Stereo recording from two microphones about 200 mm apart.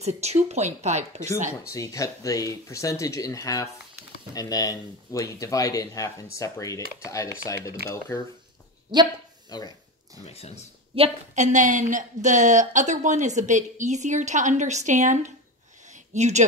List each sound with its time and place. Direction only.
0.0 s a woman's voice: 35° right (ahead or behind)
1.7 s speech: 15° left (ahead or behind)
8.9 s speech: 20° right (ahead or behind)
9.5 s speech: 20° left (ahead or behind)
10.2 s speech: 30° left (ahead or behind)
11.0 s a woman's voice: 35° right (ahead or behind)
15.9 s a sound: 35° right (ahead or behind)